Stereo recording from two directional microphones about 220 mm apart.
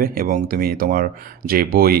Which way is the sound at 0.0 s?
40° right (ahead or behind).